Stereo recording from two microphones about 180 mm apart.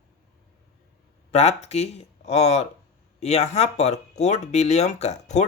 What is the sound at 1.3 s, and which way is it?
Speech, 35° left (ahead or behind).